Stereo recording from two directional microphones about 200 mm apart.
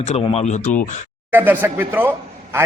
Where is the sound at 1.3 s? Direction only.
10° right (ahead or behind).